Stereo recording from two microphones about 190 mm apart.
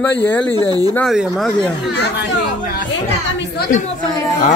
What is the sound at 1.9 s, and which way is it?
Speech, 60° left (ahead or behind).